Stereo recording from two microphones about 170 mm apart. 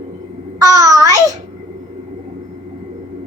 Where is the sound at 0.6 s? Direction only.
20° right (ahead or behind).